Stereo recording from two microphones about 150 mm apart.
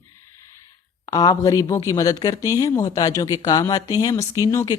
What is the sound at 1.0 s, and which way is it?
Speech, 25° left (ahead or behind).